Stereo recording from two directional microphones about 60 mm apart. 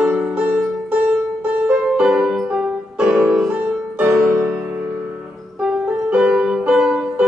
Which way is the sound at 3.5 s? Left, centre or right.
Right.